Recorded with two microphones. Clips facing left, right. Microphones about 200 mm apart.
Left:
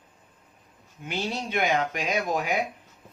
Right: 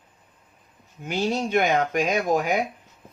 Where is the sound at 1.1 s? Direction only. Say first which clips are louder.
Right 6 dB; 45° right (ahead or behind).